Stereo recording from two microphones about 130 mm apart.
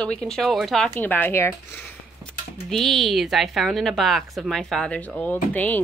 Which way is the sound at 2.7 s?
Centre (ahead or behind).